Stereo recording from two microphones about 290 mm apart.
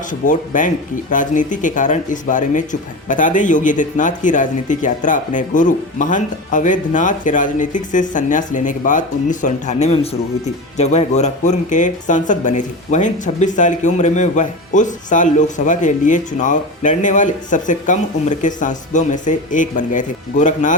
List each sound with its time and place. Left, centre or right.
0.1 s speech: left